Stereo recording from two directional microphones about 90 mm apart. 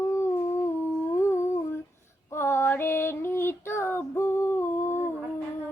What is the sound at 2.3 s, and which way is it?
Female singing, 30° left (ahead or behind).